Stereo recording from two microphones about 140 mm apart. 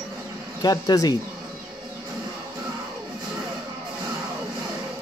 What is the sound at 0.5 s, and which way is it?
Speech, 25° left (ahead or behind).